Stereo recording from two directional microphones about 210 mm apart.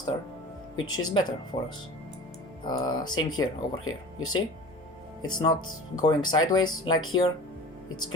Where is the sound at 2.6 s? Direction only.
20° left (ahead or behind).